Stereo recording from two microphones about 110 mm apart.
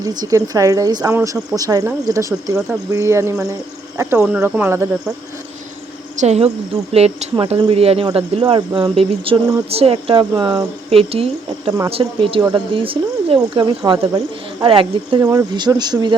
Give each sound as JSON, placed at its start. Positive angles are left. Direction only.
{"t": 0.0, "sound": "speech", "side_deg": -35}
{"t": 4.2, "sound": "speech", "side_deg": -15}
{"t": 6.1, "sound": "speech", "side_deg": -85}
{"t": 6.9, "sound": "speech", "side_deg": -70}
{"t": 8.1, "sound": "speech", "side_deg": -50}
{"t": 9.6, "sound": "speech", "side_deg": -65}
{"t": 10.8, "sound": "speech", "side_deg": -65}
{"t": 14.6, "sound": "speech", "side_deg": -50}
{"t": 15.2, "sound": "speech", "side_deg": -30}